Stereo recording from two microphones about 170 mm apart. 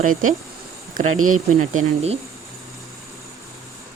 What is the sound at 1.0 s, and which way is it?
Speech, 55° right (ahead or behind).